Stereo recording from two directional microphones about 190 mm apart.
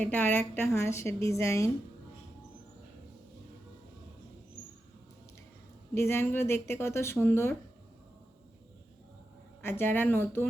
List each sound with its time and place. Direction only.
0.0 s a woman's voice: 10° left (ahead or behind)
5.9 s a woman's voice: 10° left (ahead or behind)
9.6 s a woman's voice: 10° left (ahead or behind)